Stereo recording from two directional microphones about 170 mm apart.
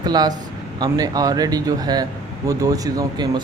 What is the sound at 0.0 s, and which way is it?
Speech, 25° right (ahead or behind).